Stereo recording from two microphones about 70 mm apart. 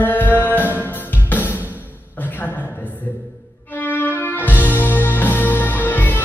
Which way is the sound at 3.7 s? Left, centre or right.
Left.